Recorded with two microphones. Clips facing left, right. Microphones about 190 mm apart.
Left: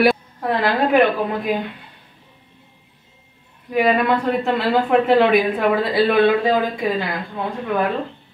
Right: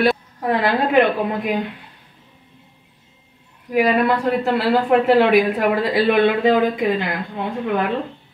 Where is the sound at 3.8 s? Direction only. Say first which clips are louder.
Even; 5° right (ahead or behind).